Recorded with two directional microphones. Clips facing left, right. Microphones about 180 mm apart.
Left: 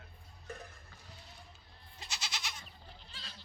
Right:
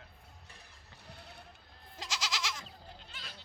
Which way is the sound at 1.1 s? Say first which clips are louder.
Right 5 dB; 65° right (ahead or behind).